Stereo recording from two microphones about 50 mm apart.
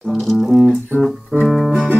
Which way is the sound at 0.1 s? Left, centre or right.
Centre.